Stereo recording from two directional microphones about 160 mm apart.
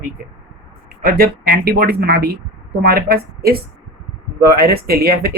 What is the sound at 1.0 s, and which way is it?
Speech, 70° right (ahead or behind).